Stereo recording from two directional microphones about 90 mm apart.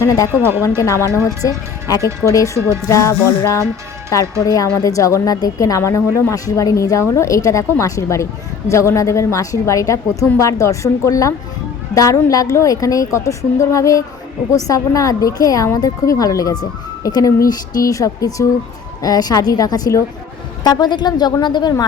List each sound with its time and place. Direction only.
0.0 s speech: 40° left (ahead or behind)
0.3 s speech: 25° right (ahead or behind)
0.8 s a woman's voice: 35° left (ahead or behind)
2.2 s a woman's voice: 40° left (ahead or behind)